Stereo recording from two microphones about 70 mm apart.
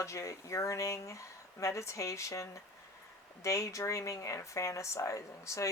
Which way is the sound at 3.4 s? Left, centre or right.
Left.